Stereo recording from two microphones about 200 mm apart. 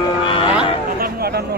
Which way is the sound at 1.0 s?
50° right (ahead or behind).